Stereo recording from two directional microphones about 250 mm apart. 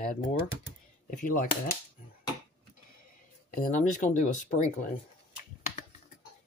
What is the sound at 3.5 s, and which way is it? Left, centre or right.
Speech, left.